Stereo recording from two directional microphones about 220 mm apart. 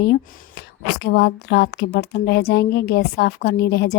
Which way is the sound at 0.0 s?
45° left (ahead or behind).